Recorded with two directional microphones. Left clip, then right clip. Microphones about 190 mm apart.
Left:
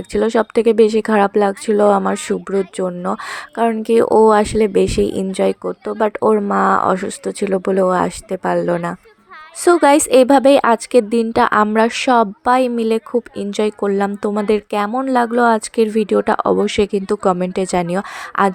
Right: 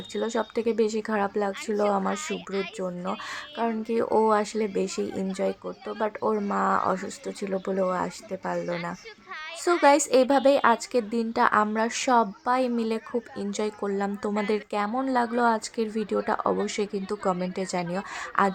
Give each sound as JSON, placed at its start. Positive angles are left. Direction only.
{"t": 0.1, "sound": "a woman's voice", "side_deg": 40}